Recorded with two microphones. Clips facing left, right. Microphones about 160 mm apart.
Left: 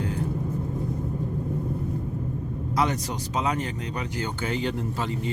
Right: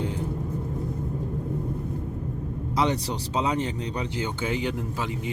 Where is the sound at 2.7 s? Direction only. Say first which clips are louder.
Right 1 dB; 30° right (ahead or behind).